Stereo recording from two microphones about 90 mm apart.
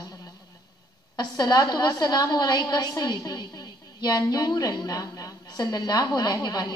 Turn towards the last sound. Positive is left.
turn(degrees=50)  # may be behind; listen again after turning